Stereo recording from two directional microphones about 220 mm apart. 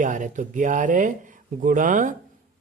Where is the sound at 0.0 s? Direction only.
35° right (ahead or behind).